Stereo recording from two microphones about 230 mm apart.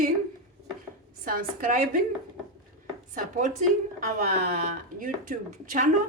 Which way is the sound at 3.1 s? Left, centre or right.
Right.